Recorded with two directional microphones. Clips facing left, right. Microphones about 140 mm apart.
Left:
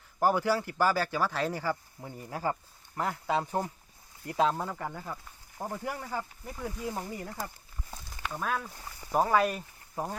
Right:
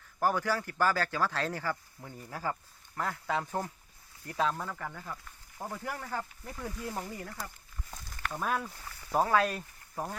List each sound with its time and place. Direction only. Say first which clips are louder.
0.2 s speech: left 3 dB; 15° left (ahead or behind)
1.7 s speech: left 4 dB; 20° left (ahead or behind); by 7.1 s 5° left (ahead or behind)
7.1 s speech: left 3 dB; 20° left (ahead or behind)
7.9 s a sound: left 1 dB; centre (ahead or behind)
8.7 s speech: left 2 dB; 25° left (ahead or behind)
9.1 s speech: left 2 dB; 5° left (ahead or behind)